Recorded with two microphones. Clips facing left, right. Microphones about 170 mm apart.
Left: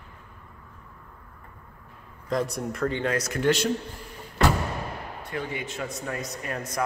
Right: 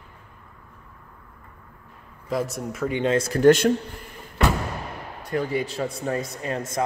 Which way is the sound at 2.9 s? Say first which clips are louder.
Right 5 dB; 20° right (ahead or behind).